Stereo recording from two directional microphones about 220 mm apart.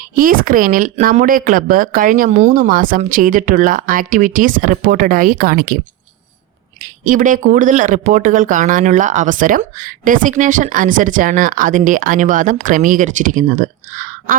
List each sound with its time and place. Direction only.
0.2 s speech: 40° right (ahead or behind)
7.0 s speech: 35° right (ahead or behind)